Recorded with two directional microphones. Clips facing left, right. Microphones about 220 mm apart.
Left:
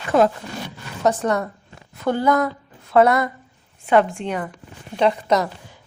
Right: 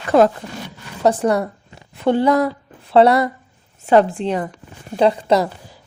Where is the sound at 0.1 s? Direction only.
35° right (ahead or behind).